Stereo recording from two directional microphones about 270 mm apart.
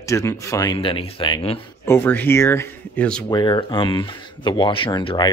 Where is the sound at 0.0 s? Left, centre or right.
Centre.